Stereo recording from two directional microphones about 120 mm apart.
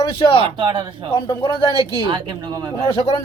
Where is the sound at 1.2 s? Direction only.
45° left (ahead or behind).